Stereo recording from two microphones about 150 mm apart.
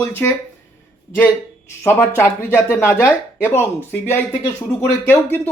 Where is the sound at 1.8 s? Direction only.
15° left (ahead or behind).